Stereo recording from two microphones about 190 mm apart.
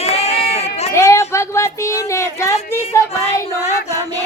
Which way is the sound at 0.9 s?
15° left (ahead or behind).